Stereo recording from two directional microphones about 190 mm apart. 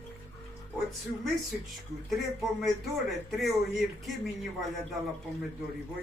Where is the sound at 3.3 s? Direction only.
Centre (ahead or behind).